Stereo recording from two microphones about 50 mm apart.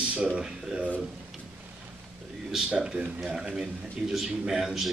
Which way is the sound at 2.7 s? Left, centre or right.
Centre.